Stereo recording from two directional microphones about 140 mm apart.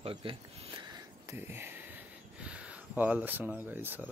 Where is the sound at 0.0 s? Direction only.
40° right (ahead or behind).